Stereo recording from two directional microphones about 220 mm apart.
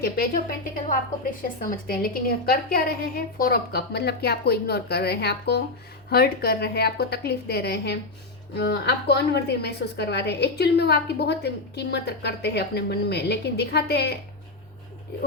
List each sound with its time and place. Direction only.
0.9 s a woman's voice: 40° left (ahead or behind)